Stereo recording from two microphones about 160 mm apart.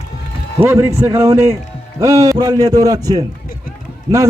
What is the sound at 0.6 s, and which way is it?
A man's voice, 15° right (ahead or behind).